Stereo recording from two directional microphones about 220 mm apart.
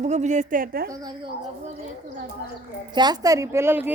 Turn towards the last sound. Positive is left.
turn(degrees=-10)  # may be behind; listen again after turning